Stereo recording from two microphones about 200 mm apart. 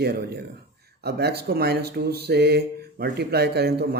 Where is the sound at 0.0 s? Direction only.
50° right (ahead or behind).